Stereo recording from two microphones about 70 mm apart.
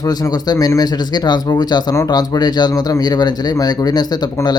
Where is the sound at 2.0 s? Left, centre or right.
Left.